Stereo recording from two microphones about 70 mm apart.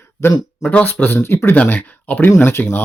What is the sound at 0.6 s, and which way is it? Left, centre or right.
Speech, left.